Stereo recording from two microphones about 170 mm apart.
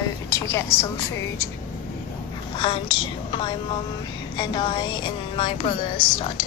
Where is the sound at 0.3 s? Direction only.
15° left (ahead or behind).